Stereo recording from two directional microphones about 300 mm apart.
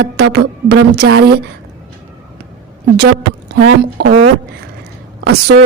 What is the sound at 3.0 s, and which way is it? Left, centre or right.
Speech, right.